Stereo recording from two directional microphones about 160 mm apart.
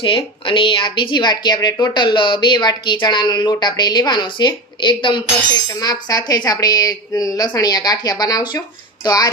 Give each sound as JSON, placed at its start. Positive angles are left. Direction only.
{"t": 0.0, "sound": "a woman's voice", "side_deg": 30}